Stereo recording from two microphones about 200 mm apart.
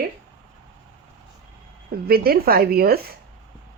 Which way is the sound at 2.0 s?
50° right (ahead or behind).